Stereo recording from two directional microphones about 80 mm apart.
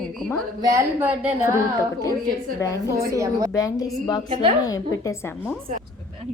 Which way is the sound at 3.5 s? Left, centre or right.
Left.